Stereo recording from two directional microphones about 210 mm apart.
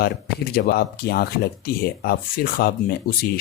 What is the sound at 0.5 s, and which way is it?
Speech, 50° left (ahead or behind).